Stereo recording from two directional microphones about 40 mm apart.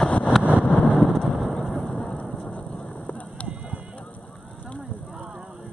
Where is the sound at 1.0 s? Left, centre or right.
Centre.